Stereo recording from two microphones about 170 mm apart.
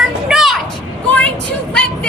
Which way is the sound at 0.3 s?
Centre (ahead or behind).